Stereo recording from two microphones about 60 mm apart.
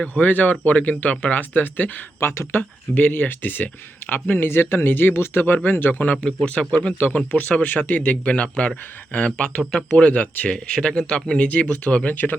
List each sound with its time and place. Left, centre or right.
0.0 s speech: left
2.2 s speech: left
2.5 s speech: left
6.2 s speech: centre